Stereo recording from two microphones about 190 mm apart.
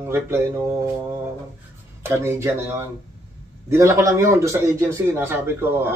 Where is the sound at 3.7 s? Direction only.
15° right (ahead or behind).